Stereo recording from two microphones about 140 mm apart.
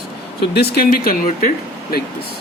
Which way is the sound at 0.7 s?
90° left.